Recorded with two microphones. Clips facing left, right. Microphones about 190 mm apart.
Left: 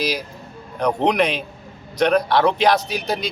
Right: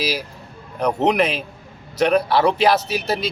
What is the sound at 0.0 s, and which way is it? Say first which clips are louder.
Speech: even; 5° right (ahead or behind).